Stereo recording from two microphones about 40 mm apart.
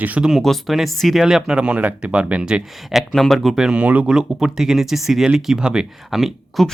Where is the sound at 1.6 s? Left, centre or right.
Right.